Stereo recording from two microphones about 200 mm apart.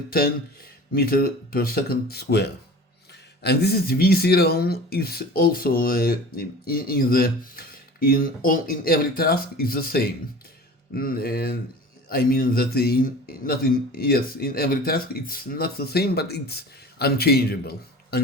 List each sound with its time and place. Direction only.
0.9 s a man's voice: 50° left (ahead or behind)